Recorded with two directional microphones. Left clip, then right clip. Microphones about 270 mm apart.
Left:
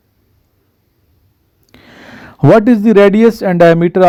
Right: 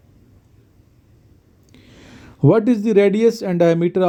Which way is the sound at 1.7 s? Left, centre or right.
Left.